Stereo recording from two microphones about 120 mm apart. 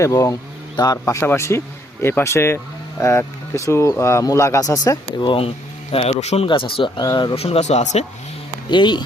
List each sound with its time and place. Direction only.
0.0 s speech: 30° left (ahead or behind)
5.3 s speech: 50° left (ahead or behind)
6.5 s speech: 45° left (ahead or behind)
7.3 s speech: 60° left (ahead or behind)
8.7 s speech: 40° left (ahead or behind)